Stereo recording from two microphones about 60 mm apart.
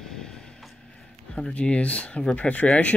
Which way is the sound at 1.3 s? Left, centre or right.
Centre.